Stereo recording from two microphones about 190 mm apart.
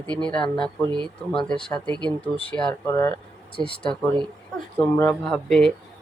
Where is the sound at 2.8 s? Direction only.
15° left (ahead or behind).